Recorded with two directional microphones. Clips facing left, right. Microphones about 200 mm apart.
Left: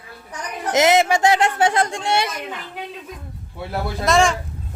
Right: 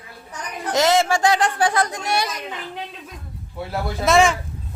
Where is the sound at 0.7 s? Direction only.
20° left (ahead or behind).